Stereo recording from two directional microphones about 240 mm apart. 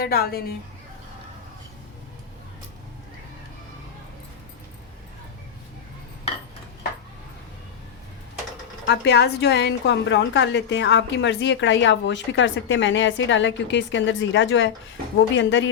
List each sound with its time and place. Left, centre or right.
0.0 s a woman's voice: left
8.9 s a woman's voice: left